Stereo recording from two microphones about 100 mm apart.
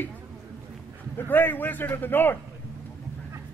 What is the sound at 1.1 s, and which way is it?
A man's voice, 20° left (ahead or behind).